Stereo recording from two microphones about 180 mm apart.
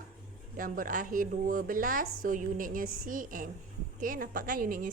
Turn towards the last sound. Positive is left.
turn(degrees=-50)  # may be behind; listen again after turning